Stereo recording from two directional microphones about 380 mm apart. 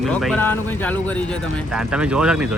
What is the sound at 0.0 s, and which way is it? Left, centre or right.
Speech, centre.